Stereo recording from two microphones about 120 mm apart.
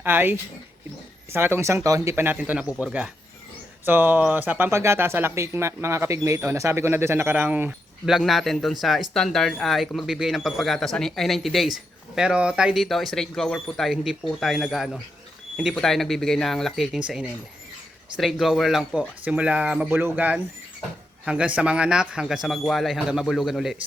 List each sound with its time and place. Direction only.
0.0 s speech: 15° right (ahead or behind)
8.1 s speech: centre (ahead or behind)
19.9 s speech: 20° right (ahead or behind); by 23.7 s centre (ahead or behind)